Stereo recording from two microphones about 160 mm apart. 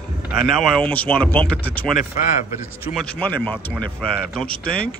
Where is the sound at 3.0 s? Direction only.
5° left (ahead or behind).